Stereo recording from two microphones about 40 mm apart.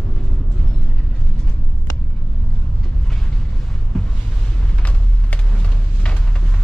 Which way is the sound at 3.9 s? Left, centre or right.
Centre.